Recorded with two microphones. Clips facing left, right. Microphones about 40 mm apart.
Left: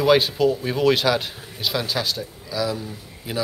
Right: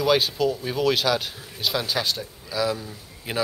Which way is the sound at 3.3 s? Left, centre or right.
Right.